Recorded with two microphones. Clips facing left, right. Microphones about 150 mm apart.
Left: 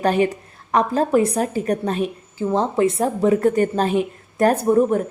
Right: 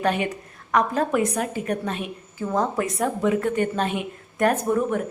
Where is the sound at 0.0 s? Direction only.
35° left (ahead or behind).